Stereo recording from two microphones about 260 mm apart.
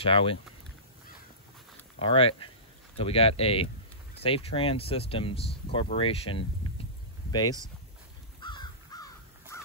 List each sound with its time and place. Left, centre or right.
0.0 s speech: left
2.0 s speech: left
8.4 s crow: centre